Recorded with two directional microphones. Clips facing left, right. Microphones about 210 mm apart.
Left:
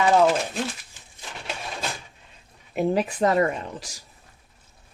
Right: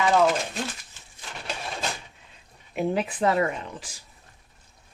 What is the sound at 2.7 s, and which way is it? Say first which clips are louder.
Speech: left 3 dB; 40° left (ahead or behind).